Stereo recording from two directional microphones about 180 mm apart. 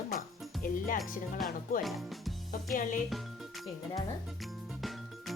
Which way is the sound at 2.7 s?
45° left (ahead or behind).